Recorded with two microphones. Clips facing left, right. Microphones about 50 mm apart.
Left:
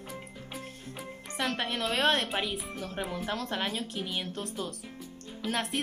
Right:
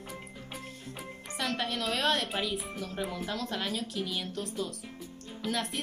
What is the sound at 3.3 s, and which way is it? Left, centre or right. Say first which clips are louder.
Speech: left 2 dB; left.